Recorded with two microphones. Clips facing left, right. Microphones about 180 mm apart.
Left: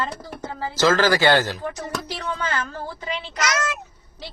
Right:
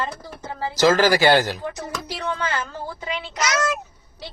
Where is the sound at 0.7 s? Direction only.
15° right (ahead or behind).